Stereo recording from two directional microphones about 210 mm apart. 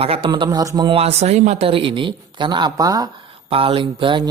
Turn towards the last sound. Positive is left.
turn(degrees=-25)  # may be behind; listen again after turning